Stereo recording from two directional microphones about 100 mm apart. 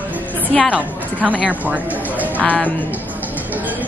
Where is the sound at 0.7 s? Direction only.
15° right (ahead or behind).